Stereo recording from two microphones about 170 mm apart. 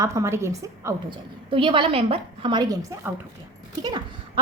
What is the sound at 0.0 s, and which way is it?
Speech, 20° right (ahead or behind).